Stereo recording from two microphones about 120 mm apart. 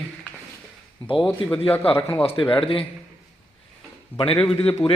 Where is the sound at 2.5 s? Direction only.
45° left (ahead or behind).